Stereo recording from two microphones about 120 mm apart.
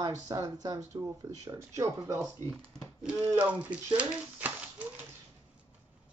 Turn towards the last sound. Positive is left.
turn(degrees=-10)  # may be behind; listen again after turning